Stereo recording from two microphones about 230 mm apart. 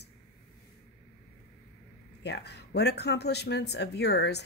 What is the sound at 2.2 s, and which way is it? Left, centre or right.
Speech, left.